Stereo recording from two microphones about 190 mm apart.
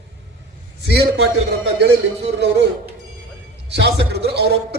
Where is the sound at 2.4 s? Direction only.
65° right (ahead or behind).